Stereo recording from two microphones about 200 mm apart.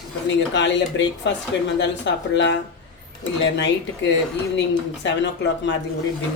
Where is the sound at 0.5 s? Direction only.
65° left (ahead or behind).